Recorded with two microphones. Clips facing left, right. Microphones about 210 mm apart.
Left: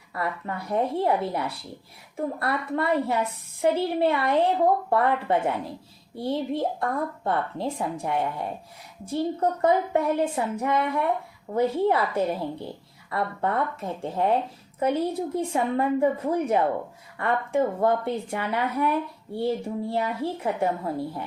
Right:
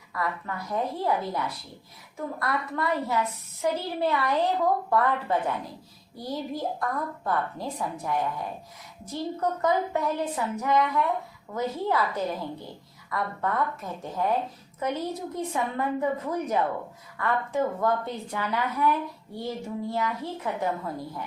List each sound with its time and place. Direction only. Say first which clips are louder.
0.1 s a woman's voice: left 2 dB; 30° left (ahead or behind)